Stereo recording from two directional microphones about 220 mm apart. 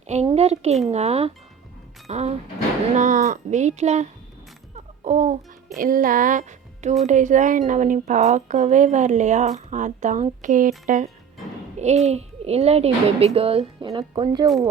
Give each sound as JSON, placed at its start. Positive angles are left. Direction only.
{"t": 0.1, "sound": "a woman's voice", "side_deg": -30}